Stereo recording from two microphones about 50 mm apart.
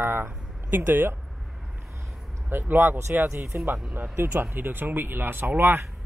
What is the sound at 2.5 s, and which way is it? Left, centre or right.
Speech, right.